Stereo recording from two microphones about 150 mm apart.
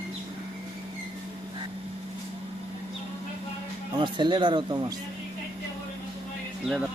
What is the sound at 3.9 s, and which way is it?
Speech, 30° right (ahead or behind).